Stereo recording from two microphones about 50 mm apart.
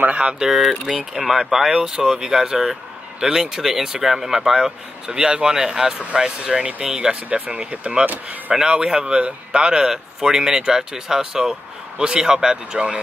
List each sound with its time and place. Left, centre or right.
0.4 s speech: centre